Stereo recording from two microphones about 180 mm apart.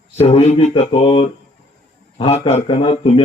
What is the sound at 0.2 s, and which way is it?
A man's voice, 35° left (ahead or behind).